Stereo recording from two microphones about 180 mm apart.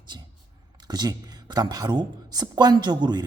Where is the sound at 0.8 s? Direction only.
20° right (ahead or behind).